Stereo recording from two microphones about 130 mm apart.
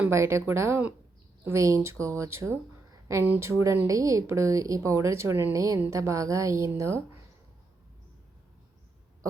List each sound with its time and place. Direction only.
0.1 s speech: 20° right (ahead or behind)